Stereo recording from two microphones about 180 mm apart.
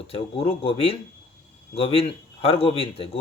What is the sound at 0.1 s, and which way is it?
Speech, 35° left (ahead or behind).